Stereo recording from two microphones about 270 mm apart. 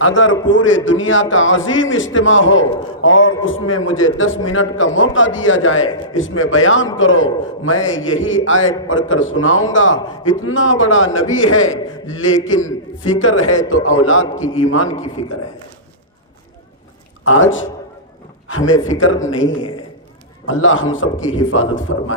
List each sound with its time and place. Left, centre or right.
0.0 s a man's voice: left
17.2 s a man's voice: left
20.4 s a man's voice: left